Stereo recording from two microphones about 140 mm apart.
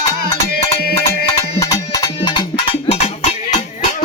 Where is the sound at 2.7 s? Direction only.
45° left (ahead or behind).